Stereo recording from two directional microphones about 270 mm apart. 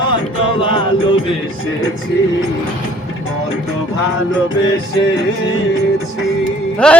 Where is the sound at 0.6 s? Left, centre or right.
Centre.